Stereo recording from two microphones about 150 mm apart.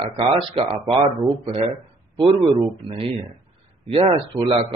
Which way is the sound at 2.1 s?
35° right (ahead or behind).